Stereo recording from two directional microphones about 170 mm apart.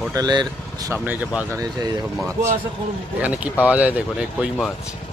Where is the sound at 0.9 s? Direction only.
10° right (ahead or behind).